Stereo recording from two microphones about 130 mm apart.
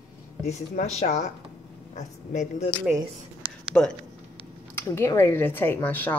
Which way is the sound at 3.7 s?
10° left (ahead or behind).